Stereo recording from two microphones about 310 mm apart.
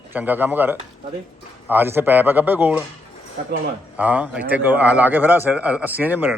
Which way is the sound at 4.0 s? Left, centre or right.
Centre.